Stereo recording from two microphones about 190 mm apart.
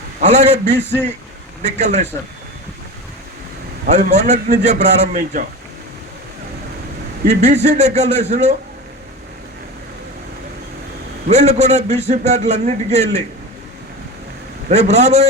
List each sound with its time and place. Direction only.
0.2 s a man's voice: 35° right (ahead or behind)
3.8 s a man's voice: 40° right (ahead or behind)
7.3 s a man's voice: 35° right (ahead or behind)
11.3 s a man's voice: 35° right (ahead or behind)
14.7 s a man's voice: 35° right (ahead or behind)